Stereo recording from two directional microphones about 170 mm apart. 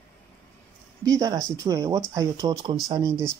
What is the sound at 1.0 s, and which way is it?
Speech, 20° right (ahead or behind).